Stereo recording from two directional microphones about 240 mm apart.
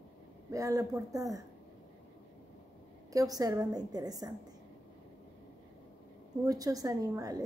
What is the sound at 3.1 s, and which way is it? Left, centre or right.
A woman's voice, centre.